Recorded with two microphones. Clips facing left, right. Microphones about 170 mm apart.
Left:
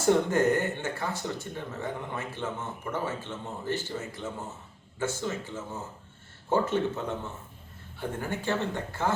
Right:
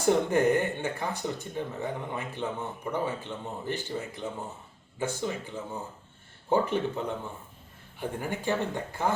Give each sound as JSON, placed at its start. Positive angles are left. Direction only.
{"t": 0.0, "sound": "speech", "side_deg": -15}